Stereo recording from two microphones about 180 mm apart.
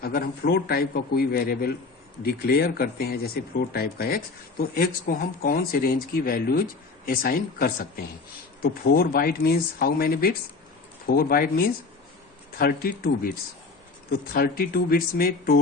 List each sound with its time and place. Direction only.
0.0 s speech: 55° left (ahead or behind)
14.3 s speech: 55° left (ahead or behind)